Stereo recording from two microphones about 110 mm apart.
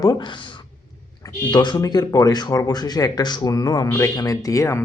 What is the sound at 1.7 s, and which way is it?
Speech, 30° left (ahead or behind).